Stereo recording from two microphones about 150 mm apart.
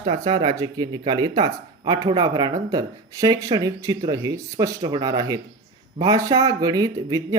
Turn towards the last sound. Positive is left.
turn(degrees=-25)  # may be behind; listen again after turning